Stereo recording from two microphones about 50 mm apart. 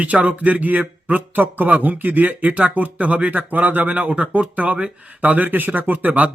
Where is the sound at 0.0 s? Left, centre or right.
Right.